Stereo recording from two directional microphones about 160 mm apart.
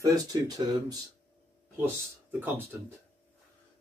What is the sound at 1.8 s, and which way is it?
Speech, 15° right (ahead or behind).